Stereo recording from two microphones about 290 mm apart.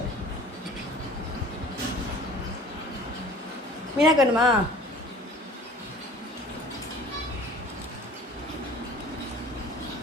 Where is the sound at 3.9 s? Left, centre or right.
Centre.